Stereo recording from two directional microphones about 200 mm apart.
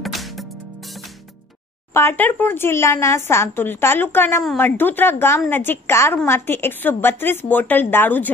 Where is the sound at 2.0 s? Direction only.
10° left (ahead or behind).